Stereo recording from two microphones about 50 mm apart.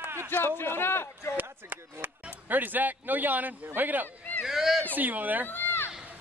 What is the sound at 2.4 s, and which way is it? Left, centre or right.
A man's voice, right.